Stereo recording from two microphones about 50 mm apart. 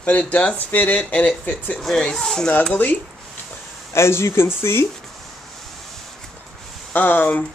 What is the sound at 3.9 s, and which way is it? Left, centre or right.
Speech, left.